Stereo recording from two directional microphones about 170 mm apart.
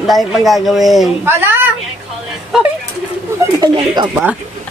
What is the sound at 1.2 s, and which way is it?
Speech, 10° right (ahead or behind).